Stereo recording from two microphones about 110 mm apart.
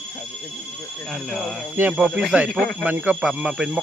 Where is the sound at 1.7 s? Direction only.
15° right (ahead or behind).